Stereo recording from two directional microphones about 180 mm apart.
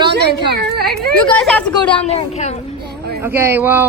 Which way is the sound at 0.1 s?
65° right (ahead or behind).